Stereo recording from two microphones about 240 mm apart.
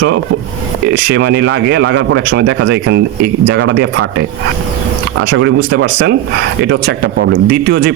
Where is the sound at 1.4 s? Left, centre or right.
Right.